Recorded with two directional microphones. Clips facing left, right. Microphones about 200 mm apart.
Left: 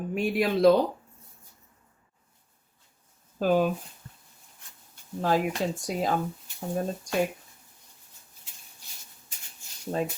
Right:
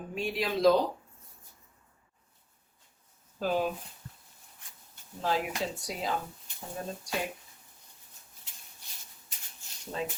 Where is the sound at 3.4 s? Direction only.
50° left (ahead or behind).